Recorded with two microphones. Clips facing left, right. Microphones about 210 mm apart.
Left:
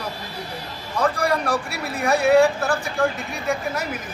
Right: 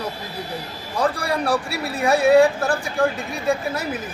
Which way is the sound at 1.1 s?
30° right (ahead or behind).